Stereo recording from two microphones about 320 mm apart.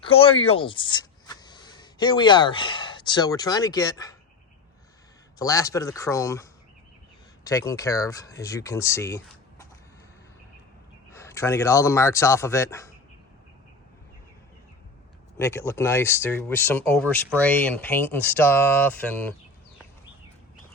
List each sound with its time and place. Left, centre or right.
0.0 s speech: centre
5.4 s speech: centre
11.1 s speech: centre
15.4 s speech: centre